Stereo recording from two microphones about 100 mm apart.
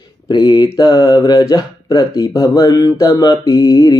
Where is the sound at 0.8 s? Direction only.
40° left (ahead or behind).